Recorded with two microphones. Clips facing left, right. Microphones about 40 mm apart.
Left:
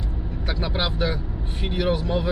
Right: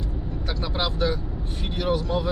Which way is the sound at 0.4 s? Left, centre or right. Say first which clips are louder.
Left 2 dB; centre.